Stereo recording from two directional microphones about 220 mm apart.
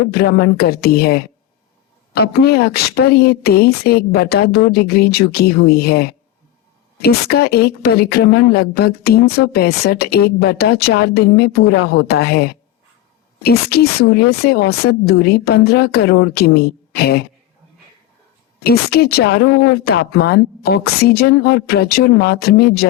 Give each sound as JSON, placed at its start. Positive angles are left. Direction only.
{"t": 0.0, "sound": "a woman's voice", "side_deg": 45}
{"t": 18.6, "sound": "a woman's voice", "side_deg": 45}